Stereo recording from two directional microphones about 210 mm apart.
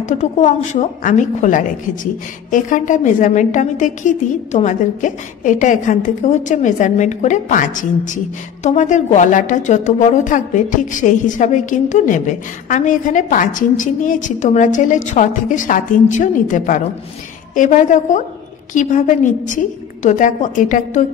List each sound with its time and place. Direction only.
0.0 s a woman's voice: 35° left (ahead or behind)